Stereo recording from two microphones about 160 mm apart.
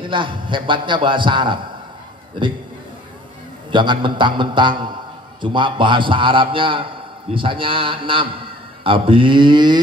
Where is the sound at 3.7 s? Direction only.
30° right (ahead or behind).